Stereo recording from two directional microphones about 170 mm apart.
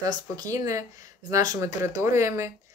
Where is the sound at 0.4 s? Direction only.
20° right (ahead or behind).